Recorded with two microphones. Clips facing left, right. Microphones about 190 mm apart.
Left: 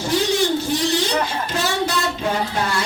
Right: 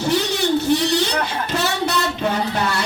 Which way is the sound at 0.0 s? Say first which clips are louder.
Even; 65° right (ahead or behind).